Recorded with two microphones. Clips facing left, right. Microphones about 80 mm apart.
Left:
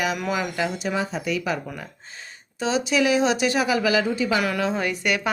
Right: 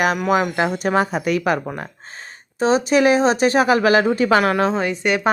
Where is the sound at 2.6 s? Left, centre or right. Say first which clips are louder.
Right 6 dB; right.